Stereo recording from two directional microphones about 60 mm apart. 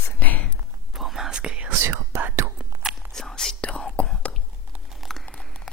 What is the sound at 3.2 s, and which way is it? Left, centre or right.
Whispering, centre.